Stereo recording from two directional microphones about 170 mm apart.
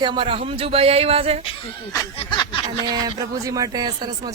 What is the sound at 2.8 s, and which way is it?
Speech, 25° right (ahead or behind).